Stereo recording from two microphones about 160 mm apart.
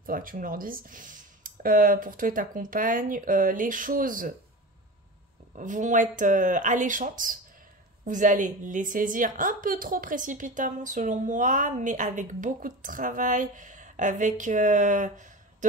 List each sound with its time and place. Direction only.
0.0 s speech: 60° right (ahead or behind)
5.6 s a woman's voice: 50° right (ahead or behind)